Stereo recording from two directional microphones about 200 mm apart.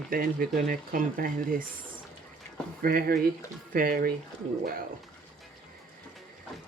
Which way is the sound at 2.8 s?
45° right (ahead or behind).